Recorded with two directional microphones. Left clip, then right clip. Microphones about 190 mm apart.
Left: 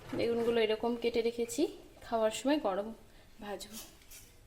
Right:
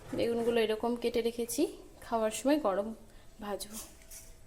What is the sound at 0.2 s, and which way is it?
A woman's voice, centre (ahead or behind).